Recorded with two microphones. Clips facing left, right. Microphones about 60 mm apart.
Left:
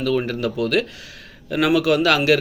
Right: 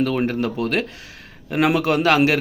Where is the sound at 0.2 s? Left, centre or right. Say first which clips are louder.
Right 1 dB; right.